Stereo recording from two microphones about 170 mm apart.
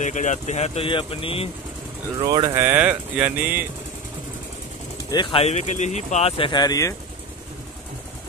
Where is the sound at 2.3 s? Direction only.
25° right (ahead or behind).